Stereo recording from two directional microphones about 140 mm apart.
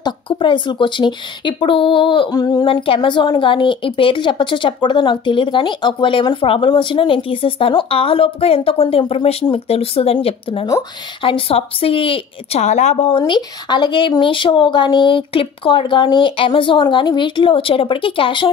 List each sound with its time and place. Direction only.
0.0 s speech: 35° left (ahead or behind)
12.6 s a woman's voice: 55° left (ahead or behind)
13.2 s speech: 30° left (ahead or behind)